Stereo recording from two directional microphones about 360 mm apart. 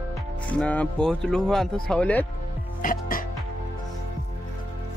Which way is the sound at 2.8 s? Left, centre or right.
Left.